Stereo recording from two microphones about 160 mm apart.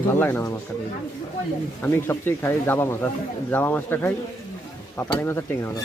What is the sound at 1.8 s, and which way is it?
Speech, 15° left (ahead or behind).